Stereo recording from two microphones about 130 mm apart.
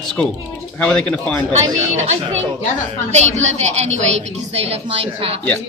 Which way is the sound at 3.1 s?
60° right (ahead or behind).